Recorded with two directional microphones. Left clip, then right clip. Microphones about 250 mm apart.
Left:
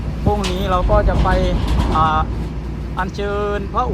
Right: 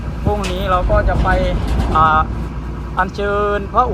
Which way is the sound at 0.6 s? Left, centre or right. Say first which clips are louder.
Right 2 dB; centre.